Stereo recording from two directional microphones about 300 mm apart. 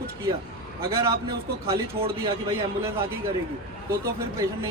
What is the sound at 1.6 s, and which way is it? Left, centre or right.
A man's voice, centre.